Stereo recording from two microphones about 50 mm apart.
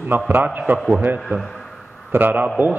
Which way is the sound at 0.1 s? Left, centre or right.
Right.